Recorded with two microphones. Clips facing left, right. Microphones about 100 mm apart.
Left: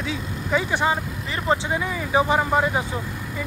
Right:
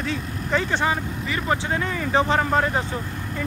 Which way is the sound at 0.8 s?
20° left (ahead or behind).